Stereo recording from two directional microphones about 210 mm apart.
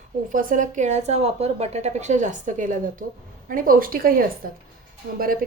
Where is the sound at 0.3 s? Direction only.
40° right (ahead or behind).